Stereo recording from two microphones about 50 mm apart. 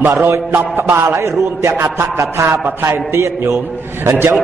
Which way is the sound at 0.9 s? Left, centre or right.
Right.